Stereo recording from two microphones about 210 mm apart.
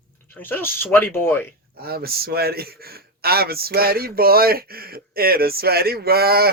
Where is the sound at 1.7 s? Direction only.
45° right (ahead or behind).